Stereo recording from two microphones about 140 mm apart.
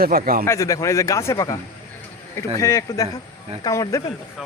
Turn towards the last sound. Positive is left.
turn(degrees=25)  # may be behind; listen again after turning